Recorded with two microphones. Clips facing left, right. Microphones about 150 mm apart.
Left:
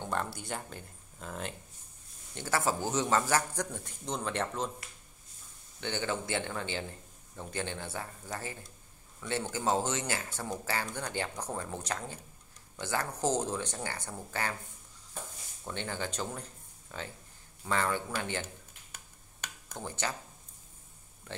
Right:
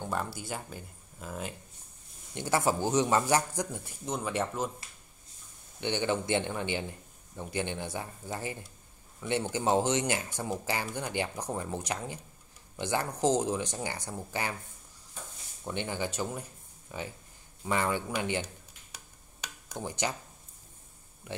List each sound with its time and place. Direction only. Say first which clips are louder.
0.0 s speech: right 1 dB; 5° right (ahead or behind)
2.3 s speech: right 3 dB; 15° right (ahead or behind)
5.8 s speech: right 4 dB; 15° right (ahead or behind)
15.6 s speech: right 3 dB; 15° right (ahead or behind)
19.4 s a sound: right 3 dB; 15° right (ahead or behind)
21.3 s speech: right 3 dB; 10° right (ahead or behind)